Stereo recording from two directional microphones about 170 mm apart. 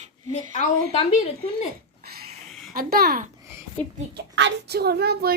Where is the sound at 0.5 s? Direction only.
45° left (ahead or behind).